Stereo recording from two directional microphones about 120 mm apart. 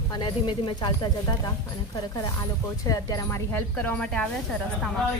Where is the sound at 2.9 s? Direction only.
30° left (ahead or behind).